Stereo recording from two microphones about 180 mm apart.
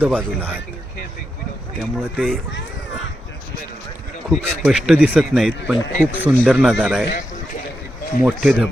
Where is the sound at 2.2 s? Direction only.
5° left (ahead or behind).